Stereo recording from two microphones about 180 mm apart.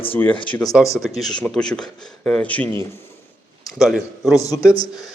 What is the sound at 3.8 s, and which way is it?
Speech, centre (ahead or behind).